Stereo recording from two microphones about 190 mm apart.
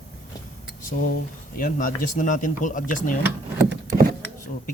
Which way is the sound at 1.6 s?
45° left (ahead or behind).